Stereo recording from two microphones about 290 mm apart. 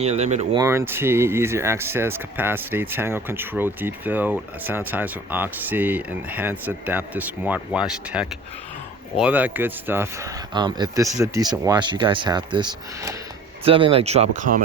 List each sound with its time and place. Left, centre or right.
0.0 s speech: right
0.6 s speech: centre